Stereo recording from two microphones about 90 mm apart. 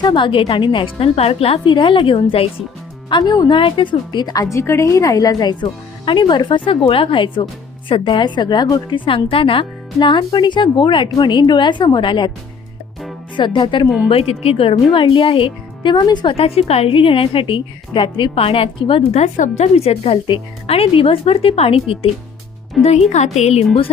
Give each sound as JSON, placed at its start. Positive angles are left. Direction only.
{"t": 0.0, "sound": "speech", "side_deg": 60}
{"t": 3.1, "sound": "a woman's voice", "side_deg": 55}
{"t": 3.5, "sound": "a woman's voice", "side_deg": 75}
{"t": 9.0, "sound": "speech", "side_deg": 90}
{"t": 13.3, "sound": "speech", "side_deg": 65}
{"t": 14.1, "sound": "speech", "side_deg": 90}
{"t": 16.3, "sound": "a woman's voice", "side_deg": 90}
{"t": 22.8, "sound": "speech", "side_deg": 0}